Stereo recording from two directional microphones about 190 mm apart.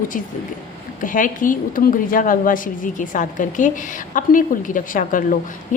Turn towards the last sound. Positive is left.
turn(degrees=45)  # may be behind; listen again after turning